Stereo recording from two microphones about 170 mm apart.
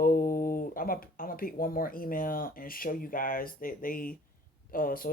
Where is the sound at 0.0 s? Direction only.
55° left (ahead or behind).